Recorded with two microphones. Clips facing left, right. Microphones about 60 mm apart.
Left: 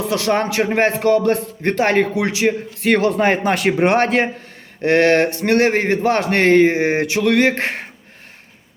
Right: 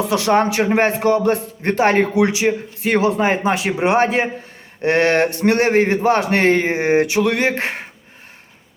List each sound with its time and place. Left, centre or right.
0.3 s a man's voice: right
2.8 s speech: centre
4.8 s a man's voice: right
6.3 s speech: left
6.6 s a man's voice: right